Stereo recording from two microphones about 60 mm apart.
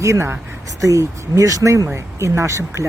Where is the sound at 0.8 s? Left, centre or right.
Right.